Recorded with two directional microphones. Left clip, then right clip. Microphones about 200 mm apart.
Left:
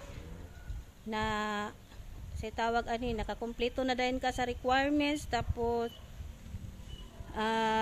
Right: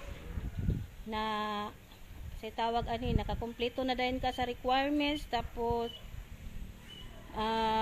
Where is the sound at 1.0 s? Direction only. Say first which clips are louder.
Left 1 dB; 10° left (ahead or behind).